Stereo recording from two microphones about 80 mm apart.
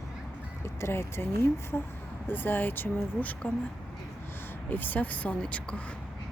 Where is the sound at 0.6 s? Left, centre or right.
Left; by 6.0 s centre.